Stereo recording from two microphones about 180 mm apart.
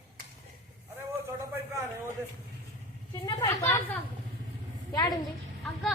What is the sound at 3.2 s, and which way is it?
Speech, 25° left (ahead or behind).